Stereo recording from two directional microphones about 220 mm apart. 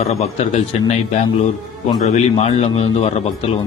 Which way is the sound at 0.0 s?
30° left (ahead or behind).